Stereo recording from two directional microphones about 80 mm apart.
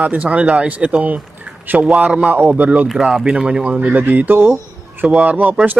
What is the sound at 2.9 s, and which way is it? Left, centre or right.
Speech, centre.